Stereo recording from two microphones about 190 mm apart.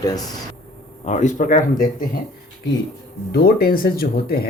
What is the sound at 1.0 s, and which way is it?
Speech, 40° left (ahead or behind).